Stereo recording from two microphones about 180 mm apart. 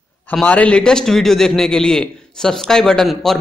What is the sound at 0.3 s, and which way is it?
A man's voice, 5° left (ahead or behind).